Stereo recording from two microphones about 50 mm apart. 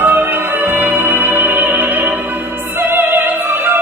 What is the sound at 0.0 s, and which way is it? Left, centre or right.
Music, right.